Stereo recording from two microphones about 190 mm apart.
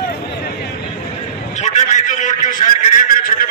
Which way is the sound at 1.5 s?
40° left (ahead or behind).